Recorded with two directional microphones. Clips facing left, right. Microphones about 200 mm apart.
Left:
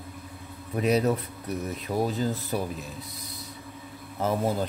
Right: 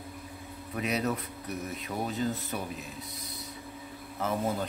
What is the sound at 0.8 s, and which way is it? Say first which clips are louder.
Speech: left 7 dB; 35° left (ahead or behind).